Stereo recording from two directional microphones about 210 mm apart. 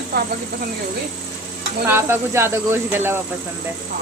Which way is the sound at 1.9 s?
10° right (ahead or behind).